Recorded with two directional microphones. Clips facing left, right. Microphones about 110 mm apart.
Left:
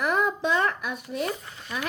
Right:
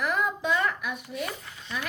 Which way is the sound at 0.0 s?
25° left (ahead or behind).